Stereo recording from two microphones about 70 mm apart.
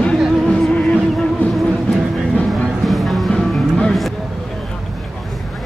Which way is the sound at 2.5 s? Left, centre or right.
Centre.